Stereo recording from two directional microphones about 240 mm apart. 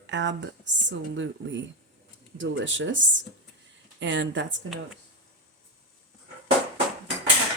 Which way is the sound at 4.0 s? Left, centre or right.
Right.